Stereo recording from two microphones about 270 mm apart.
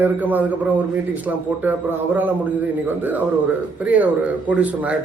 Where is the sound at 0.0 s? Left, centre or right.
Centre.